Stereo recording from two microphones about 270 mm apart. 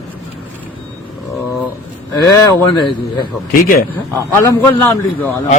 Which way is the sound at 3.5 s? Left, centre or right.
Left.